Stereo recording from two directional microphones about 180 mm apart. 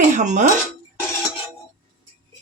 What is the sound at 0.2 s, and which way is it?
Speech, 40° right (ahead or behind).